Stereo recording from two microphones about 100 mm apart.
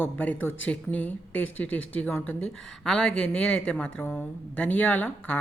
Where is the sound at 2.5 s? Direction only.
5° left (ahead or behind).